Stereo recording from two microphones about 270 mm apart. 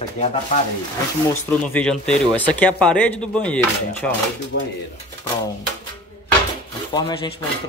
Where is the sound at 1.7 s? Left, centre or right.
Centre.